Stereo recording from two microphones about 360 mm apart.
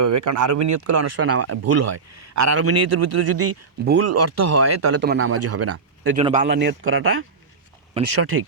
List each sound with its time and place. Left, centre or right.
0.0 s speech: right
4.9 s speech: right
6.1 s speech: centre; by 8.4 s right